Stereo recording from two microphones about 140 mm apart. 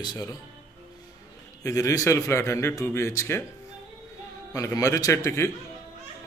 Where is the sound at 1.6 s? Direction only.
25° left (ahead or behind).